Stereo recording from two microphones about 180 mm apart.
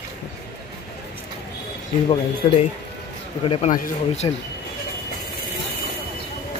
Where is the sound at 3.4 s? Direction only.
30° left (ahead or behind).